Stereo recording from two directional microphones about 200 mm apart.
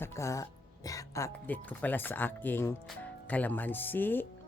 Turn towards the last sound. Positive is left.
turn(degrees=10)  # may be behind; listen again after turning